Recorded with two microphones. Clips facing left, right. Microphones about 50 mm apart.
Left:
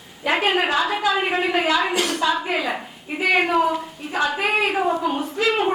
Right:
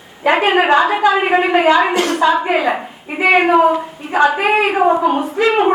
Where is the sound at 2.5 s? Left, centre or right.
Centre.